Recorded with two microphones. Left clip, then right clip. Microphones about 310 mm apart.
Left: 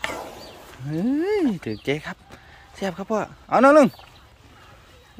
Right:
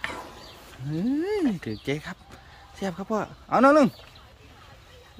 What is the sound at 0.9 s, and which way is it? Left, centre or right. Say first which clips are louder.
Speech: left 4 dB; centre.